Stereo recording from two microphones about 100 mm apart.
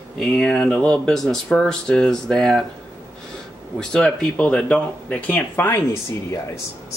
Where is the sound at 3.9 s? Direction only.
5° left (ahead or behind).